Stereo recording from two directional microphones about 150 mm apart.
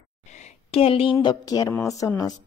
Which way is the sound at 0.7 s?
40° left (ahead or behind).